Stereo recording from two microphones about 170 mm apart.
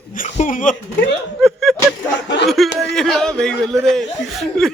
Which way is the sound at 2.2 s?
90° left.